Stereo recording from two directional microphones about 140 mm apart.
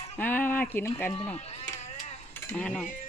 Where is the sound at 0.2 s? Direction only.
15° left (ahead or behind).